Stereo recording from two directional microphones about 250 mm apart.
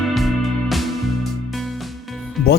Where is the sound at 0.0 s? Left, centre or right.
Centre.